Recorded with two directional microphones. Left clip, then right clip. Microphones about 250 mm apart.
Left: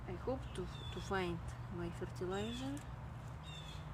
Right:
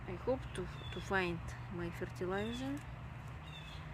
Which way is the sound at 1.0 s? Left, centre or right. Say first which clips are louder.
Right 4 dB; centre.